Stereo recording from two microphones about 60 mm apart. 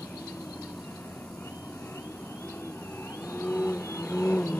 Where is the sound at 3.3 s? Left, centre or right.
Left.